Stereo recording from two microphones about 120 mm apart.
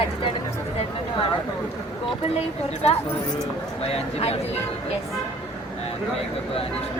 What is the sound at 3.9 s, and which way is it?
Speech, 60° left (ahead or behind).